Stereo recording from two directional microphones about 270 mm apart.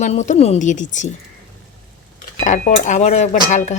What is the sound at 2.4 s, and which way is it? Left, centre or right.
Speech, left.